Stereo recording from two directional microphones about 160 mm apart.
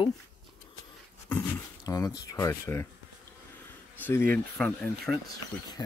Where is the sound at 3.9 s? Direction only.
10° left (ahead or behind).